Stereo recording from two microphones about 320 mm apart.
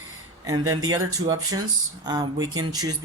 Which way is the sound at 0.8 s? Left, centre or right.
Centre.